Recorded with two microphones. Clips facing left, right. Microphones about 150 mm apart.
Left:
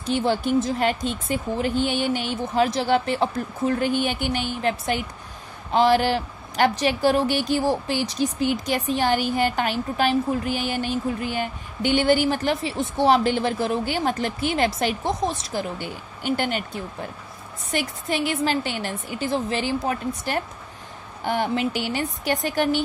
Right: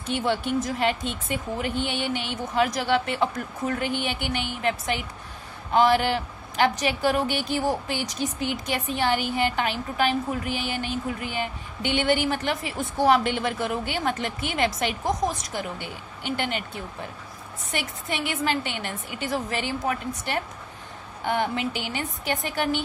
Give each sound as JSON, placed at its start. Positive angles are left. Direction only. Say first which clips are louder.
{"t": 0.0, "sound": "speech", "louder": "left 3 dB", "side_deg": 35}
{"t": 12.7, "sound": "speech", "louder": "left 1 dB", "side_deg": 25}
{"t": 15.8, "sound": "speech", "louder": "left 4 dB", "side_deg": 45}